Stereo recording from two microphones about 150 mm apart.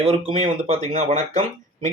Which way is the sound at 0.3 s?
40° right (ahead or behind).